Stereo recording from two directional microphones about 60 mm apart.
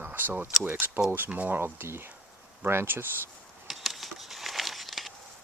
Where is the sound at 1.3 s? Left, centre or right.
Right.